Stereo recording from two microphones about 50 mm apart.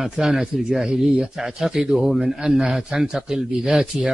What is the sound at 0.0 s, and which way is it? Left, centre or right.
Speech, centre.